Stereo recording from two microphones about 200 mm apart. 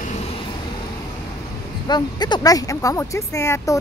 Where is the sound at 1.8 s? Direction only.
20° left (ahead or behind).